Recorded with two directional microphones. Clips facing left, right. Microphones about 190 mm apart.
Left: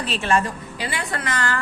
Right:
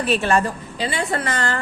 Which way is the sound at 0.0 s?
55° right (ahead or behind).